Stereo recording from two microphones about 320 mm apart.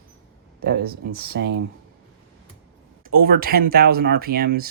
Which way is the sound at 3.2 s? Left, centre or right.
Right.